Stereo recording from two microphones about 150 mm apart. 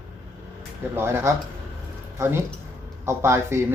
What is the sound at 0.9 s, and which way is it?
Speech, 15° right (ahead or behind).